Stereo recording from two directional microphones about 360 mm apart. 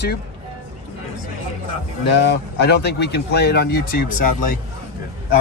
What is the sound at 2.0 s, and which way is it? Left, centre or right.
Speech, left.